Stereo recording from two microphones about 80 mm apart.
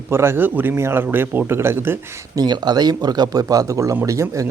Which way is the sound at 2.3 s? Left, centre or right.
Right.